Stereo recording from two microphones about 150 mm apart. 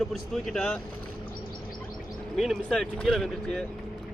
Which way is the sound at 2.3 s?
Centre (ahead or behind).